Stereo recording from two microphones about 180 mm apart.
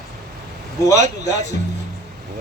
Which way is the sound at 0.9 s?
20° left (ahead or behind).